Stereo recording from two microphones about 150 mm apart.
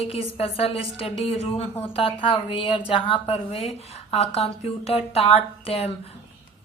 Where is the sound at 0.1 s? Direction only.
40° left (ahead or behind).